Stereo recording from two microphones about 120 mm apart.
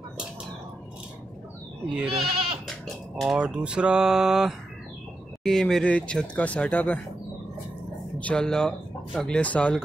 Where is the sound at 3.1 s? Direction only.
5° right (ahead or behind); by 6.9 s 10° left (ahead or behind).